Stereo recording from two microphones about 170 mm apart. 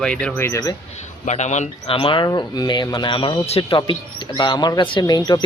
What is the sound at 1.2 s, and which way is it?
Speech, 45° left (ahead or behind).